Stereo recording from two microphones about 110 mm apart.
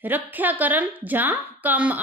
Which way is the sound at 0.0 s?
15° right (ahead or behind).